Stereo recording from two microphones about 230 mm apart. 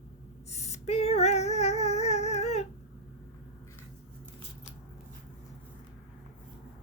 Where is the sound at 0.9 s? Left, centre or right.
Left.